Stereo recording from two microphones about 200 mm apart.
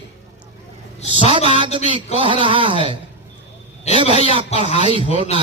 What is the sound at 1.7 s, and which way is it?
Speech, 25° right (ahead or behind).